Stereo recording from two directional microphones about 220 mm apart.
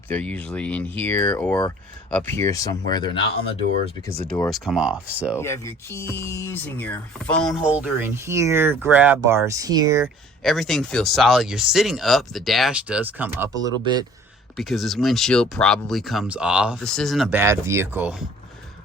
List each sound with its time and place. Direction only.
0.1 s speech: 5° left (ahead or behind)
4.3 s speech: 5° left (ahead or behind)
5.4 s speech: 10° left (ahead or behind); by 10.1 s 15° right (ahead or behind)
10.4 s speech: centre (ahead or behind); by 14.0 s 20° right (ahead or behind)
14.5 s speech: centre (ahead or behind)
17.4 s speech: 10° right (ahead or behind)